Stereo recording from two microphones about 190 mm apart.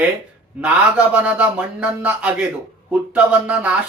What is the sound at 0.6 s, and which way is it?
Speech, 5° right (ahead or behind).